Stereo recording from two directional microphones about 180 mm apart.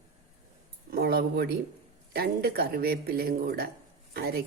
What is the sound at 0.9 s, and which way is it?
Speech, 55° right (ahead or behind).